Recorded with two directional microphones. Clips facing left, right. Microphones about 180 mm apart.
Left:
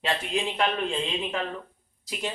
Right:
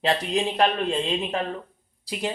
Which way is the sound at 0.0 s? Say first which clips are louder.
Right 5 dB; 35° right (ahead or behind).